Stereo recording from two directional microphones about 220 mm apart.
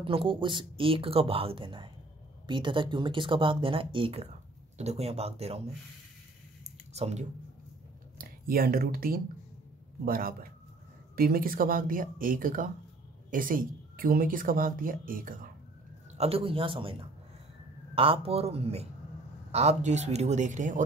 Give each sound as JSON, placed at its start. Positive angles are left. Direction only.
{"t": 0.0, "sound": "speech", "side_deg": -25}
{"t": 6.6, "sound": "a sound", "side_deg": -30}
{"t": 8.2, "sound": "speech", "side_deg": -40}
{"t": 16.2, "sound": "speech", "side_deg": -25}
{"t": 17.9, "sound": "speech", "side_deg": -25}